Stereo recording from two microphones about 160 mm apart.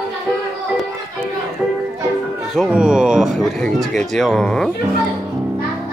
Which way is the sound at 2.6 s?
5° right (ahead or behind).